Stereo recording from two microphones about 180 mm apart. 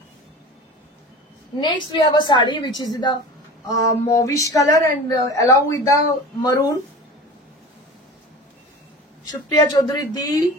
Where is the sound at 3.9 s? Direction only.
15° left (ahead or behind).